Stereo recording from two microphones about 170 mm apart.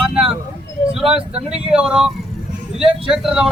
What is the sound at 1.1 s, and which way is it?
Speech, 35° right (ahead or behind).